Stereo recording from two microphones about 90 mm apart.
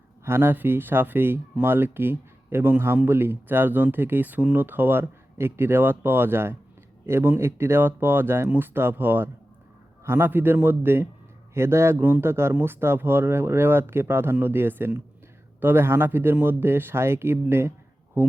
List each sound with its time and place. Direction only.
0.3 s speech: 25° right (ahead or behind)